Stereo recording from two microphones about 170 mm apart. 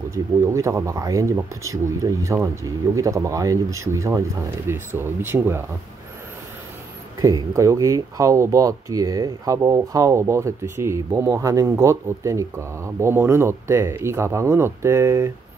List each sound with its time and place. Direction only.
0.1 s speech: 15° right (ahead or behind)
7.2 s speech: 20° right (ahead or behind)